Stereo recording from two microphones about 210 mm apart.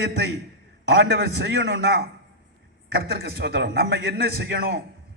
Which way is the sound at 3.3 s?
50° right (ahead or behind).